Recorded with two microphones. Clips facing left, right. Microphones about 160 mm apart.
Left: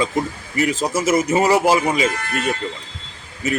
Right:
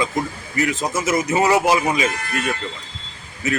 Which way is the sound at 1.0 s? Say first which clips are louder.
Left 2 dB; 30° left (ahead or behind).